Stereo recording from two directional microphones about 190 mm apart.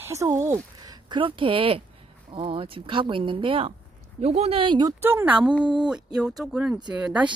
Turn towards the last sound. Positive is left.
turn(degrees=-5)  # may be behind; listen again after turning